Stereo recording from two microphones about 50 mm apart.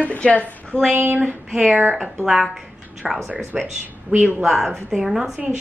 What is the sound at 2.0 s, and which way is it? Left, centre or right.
A woman's voice, centre.